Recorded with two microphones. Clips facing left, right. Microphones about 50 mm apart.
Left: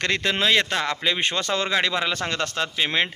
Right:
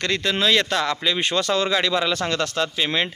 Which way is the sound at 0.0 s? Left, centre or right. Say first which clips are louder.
Right 1 dB; left.